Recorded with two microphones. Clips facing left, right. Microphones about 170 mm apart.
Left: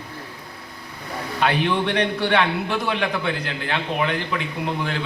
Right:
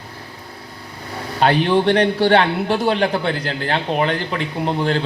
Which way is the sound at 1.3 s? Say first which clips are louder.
Right 6 dB; 35° right (ahead or behind).